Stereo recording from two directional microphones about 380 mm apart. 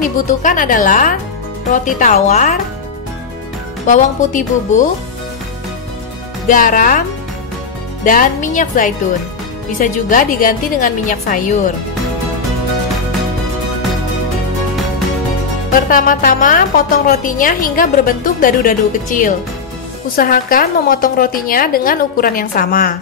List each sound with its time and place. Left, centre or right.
0.0 s a woman's voice: centre
3.8 s a woman's voice: centre
6.4 s a woman's voice: left
15.9 s a woman's voice: left